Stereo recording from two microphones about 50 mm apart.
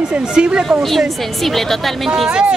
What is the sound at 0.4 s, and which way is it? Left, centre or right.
Speech, right.